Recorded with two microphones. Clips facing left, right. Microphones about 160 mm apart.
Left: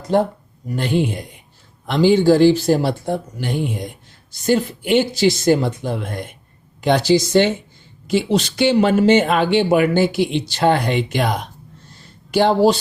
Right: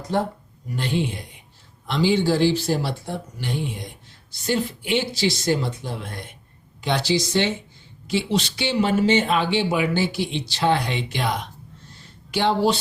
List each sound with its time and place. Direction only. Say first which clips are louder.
0.8 s speech: left 5 dB; 50° left (ahead or behind)